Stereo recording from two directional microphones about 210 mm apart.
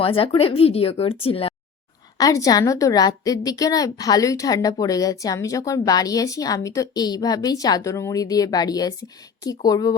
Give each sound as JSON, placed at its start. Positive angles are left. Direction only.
{"t": 0.0, "sound": "speech", "side_deg": 25}
{"t": 2.1, "sound": "a woman's voice", "side_deg": 15}